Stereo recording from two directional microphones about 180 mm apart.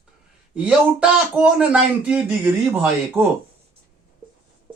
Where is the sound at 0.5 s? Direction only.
5° right (ahead or behind).